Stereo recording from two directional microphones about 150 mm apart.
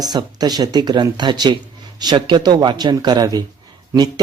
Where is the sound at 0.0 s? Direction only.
25° right (ahead or behind).